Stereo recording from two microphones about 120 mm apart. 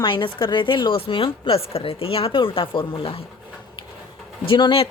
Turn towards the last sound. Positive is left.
turn(degrees=45)  # may be behind; listen again after turning